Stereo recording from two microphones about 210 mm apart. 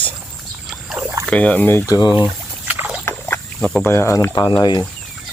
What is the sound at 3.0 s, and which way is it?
Speech, 5° left (ahead or behind).